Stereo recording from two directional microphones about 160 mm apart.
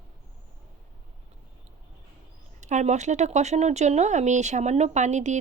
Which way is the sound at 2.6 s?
50° right (ahead or behind).